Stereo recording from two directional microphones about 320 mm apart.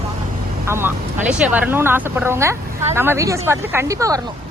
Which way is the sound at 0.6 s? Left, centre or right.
Centre.